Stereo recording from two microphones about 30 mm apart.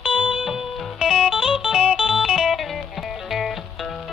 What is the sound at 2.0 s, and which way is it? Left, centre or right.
Music, centre.